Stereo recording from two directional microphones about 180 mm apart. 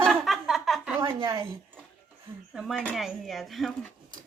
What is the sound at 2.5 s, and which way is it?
Speech, centre (ahead or behind).